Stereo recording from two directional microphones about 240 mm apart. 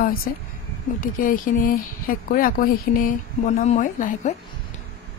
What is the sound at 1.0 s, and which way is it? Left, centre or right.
A woman's voice, left.